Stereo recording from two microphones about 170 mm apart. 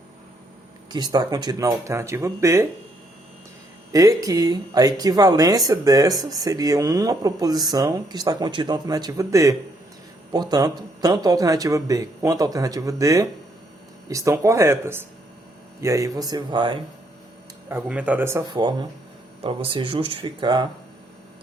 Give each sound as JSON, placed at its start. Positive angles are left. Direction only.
{"t": 0.9, "sound": "speech", "side_deg": -25}
{"t": 3.9, "sound": "speech", "side_deg": -20}
{"t": 17.7, "sound": "speech", "side_deg": -10}
{"t": 18.5, "sound": "speech", "side_deg": -30}